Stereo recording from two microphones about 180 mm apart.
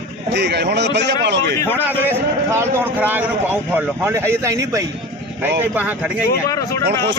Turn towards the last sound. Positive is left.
turn(degrees=20)  # may be behind; listen again after turning